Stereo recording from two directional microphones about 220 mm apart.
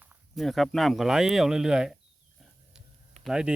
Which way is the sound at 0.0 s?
5° right (ahead or behind).